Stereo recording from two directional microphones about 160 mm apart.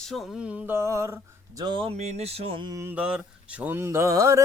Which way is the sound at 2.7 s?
10° right (ahead or behind).